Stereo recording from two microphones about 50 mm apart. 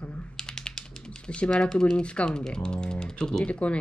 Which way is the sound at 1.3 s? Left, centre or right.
Left.